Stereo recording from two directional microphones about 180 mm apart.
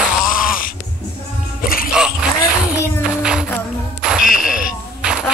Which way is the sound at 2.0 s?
5° right (ahead or behind).